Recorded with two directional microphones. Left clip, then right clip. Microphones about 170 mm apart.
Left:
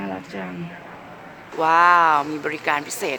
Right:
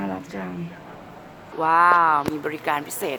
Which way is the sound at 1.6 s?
20° left (ahead or behind).